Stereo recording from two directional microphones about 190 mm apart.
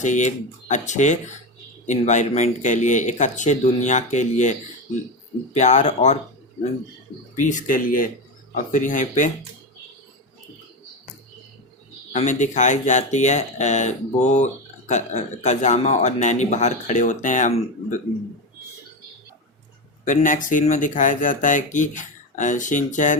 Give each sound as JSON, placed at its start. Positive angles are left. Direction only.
{"t": 0.0, "sound": "speech", "side_deg": 40}
{"t": 5.5, "sound": "speech", "side_deg": 40}
{"t": 7.3, "sound": "speech", "side_deg": 40}
{"t": 12.1, "sound": "speech", "side_deg": 40}
{"t": 20.1, "sound": "speech", "side_deg": 45}